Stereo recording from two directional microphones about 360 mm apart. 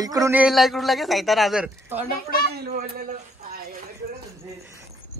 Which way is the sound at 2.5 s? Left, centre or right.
Right.